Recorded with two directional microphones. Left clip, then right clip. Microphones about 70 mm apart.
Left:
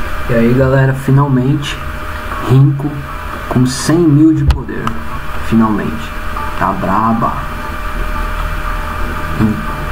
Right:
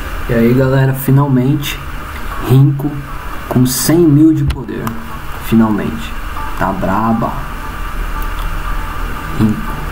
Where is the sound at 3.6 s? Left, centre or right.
Right.